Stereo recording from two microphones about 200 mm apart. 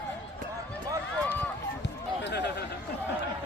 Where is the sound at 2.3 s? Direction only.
60° left (ahead or behind).